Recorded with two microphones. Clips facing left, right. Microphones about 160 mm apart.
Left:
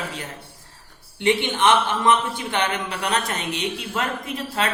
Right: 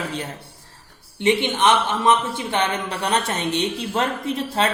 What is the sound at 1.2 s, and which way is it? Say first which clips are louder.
A man's voice: right 1 dB; 20° right (ahead or behind).